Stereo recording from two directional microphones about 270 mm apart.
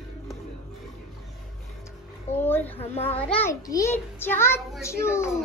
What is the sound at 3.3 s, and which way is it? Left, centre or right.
A child's voice, centre.